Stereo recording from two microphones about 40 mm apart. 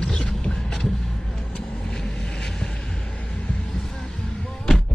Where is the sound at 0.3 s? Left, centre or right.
Centre.